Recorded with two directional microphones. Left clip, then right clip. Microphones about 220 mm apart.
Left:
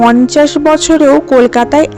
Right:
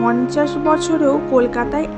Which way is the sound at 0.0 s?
40° left (ahead or behind).